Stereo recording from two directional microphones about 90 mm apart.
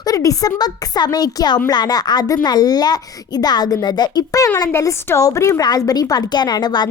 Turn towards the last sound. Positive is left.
turn(degrees=50)  # may be behind; listen again after turning